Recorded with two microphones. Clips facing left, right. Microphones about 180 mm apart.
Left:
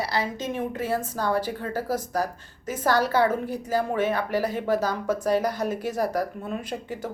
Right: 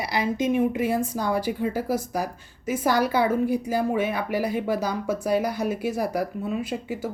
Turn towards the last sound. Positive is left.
turn(degrees=-10)  # may be behind; listen again after turning